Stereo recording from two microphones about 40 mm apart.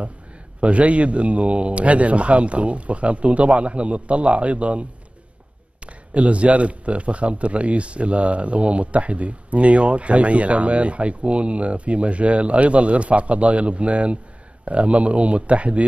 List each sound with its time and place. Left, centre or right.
0.6 s a man's voice: right
6.1 s a man's voice: right